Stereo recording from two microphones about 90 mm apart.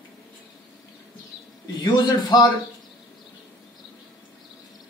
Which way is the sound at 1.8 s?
50° left (ahead or behind).